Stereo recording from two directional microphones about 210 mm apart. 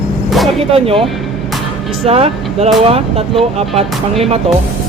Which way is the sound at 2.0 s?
30° right (ahead or behind).